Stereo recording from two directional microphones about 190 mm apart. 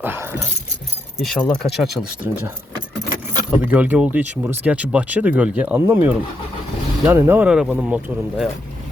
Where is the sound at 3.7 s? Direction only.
5° right (ahead or behind).